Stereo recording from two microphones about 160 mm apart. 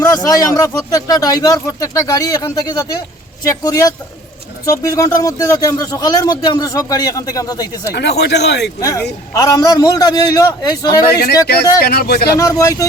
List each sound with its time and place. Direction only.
0.0 s a man's voice: 20° left (ahead or behind)
7.9 s speech: 90° left
8.8 s a man's voice: 20° left (ahead or behind)
11.8 s speech: 70° left (ahead or behind)
12.4 s a man's voice: 20° left (ahead or behind)